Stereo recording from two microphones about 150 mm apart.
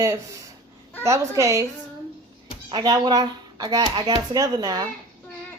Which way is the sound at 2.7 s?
30° right (ahead or behind).